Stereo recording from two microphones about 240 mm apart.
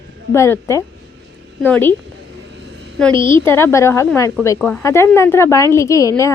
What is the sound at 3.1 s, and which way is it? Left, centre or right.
Speech, right.